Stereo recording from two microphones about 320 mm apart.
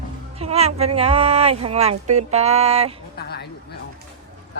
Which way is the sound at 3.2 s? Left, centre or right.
Left.